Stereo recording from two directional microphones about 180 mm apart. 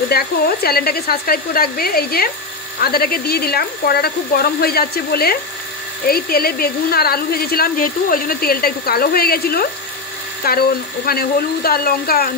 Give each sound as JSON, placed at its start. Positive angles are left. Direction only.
{"t": 0.1, "sound": "speech", "side_deg": 60}